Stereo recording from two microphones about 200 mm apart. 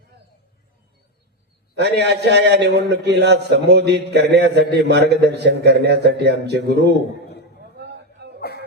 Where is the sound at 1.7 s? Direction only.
60° right (ahead or behind).